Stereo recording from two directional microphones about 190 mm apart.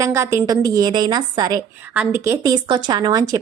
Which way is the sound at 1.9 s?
10° right (ahead or behind).